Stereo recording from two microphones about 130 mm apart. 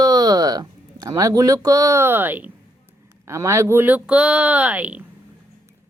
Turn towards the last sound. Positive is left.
turn(degrees=-10)  # may be behind; listen again after turning